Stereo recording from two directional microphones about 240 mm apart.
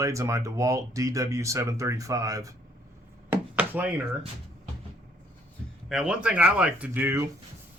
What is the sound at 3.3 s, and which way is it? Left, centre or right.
Chop, centre.